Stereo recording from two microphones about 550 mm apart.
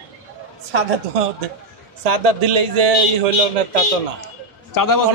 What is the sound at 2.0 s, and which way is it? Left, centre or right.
Speech, right.